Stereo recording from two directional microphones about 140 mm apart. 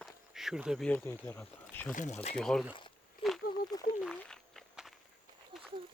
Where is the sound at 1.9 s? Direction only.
60° left (ahead or behind).